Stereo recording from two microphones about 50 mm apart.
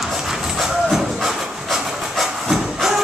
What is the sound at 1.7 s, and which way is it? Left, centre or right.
Train, centre.